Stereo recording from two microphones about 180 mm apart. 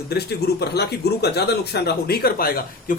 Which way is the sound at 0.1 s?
65° left (ahead or behind).